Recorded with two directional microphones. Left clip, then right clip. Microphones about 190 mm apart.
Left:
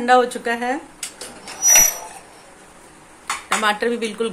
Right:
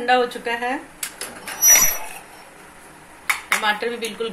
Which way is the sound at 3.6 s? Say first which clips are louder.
Left 2 dB; 40° left (ahead or behind).